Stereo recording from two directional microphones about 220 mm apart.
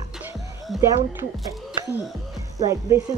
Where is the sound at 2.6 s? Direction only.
15° right (ahead or behind).